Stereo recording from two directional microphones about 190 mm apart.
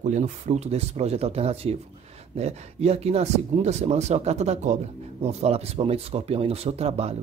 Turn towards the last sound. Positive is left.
turn(degrees=-35)  # may be behind; listen again after turning